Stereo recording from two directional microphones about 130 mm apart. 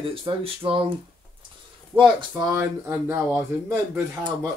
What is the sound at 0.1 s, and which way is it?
Speech, 45° right (ahead or behind).